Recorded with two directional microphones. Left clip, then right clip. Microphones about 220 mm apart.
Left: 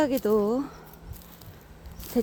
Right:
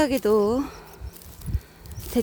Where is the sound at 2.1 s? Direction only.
25° right (ahead or behind).